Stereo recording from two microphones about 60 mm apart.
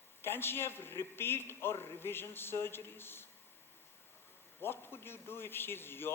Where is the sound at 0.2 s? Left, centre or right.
Left.